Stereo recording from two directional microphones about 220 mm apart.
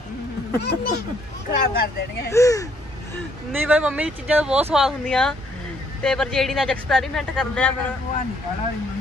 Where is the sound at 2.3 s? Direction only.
15° left (ahead or behind).